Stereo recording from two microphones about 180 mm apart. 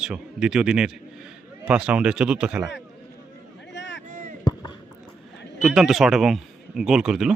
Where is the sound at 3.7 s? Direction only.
75° left (ahead or behind).